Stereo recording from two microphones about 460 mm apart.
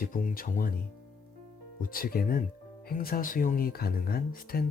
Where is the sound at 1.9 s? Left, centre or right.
Centre.